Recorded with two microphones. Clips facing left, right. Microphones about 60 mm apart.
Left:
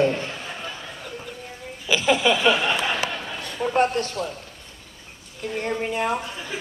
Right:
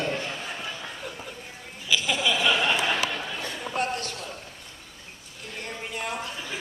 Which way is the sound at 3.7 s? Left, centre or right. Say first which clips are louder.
Left 8 dB; left.